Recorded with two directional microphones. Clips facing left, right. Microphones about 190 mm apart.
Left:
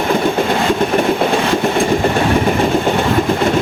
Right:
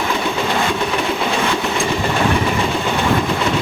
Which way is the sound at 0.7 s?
50° left (ahead or behind).